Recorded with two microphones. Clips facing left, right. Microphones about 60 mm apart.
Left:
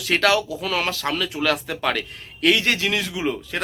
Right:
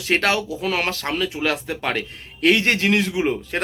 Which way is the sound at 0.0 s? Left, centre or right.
Right.